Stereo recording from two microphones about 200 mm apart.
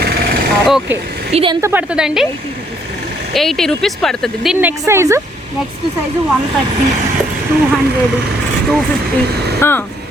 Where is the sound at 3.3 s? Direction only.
Centre (ahead or behind).